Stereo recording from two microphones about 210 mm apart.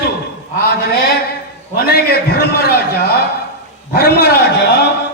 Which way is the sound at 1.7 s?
45° left (ahead or behind).